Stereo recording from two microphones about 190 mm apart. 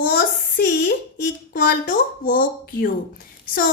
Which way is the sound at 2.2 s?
45° left (ahead or behind).